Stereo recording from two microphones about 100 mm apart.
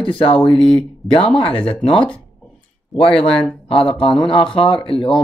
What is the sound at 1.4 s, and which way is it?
Speech, 65° left (ahead or behind).